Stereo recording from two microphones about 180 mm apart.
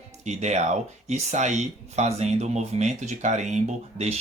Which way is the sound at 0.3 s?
40° right (ahead or behind).